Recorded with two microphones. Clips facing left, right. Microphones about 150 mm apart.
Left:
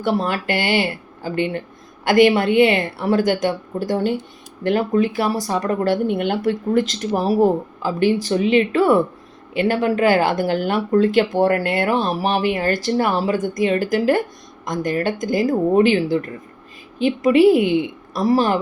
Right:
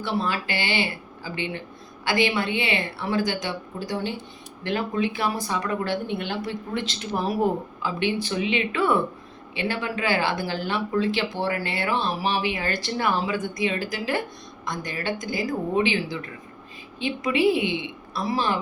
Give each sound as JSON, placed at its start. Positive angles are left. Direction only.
{"t": 0.0, "sound": "speech", "side_deg": 50}